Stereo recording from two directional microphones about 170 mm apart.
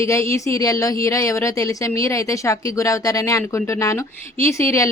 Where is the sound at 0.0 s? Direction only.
15° left (ahead or behind).